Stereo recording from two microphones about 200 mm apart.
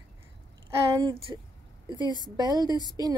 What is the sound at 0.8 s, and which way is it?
A woman's voice, 25° right (ahead or behind).